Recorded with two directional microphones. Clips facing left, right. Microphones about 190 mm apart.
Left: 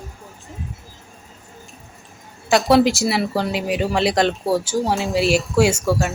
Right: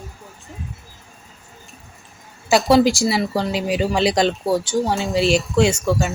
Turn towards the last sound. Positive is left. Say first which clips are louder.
# even
turn(degrees=5)  # may be behind; listen again after turning